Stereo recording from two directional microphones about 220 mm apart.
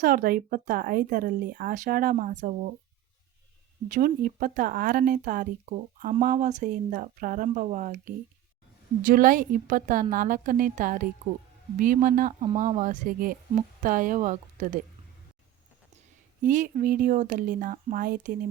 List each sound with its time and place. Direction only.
0.0 s speech: 40° right (ahead or behind)
3.8 s speech: 35° right (ahead or behind)
16.4 s speech: 35° right (ahead or behind)